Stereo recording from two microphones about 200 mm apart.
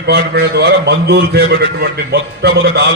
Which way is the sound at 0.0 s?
55° right (ahead or behind).